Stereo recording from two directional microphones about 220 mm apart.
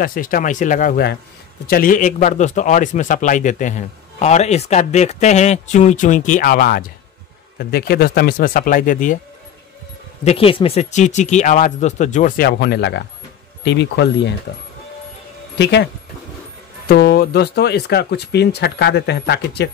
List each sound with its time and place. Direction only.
0.0 s a man's voice: 40° left (ahead or behind)
10.2 s a man's voice: 25° left (ahead or behind); by 14.3 s 50° left (ahead or behind)
15.5 s speech: 50° left (ahead or behind)